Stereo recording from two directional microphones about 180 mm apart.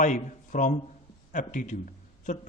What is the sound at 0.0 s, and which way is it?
A man's voice, 45° left (ahead or behind).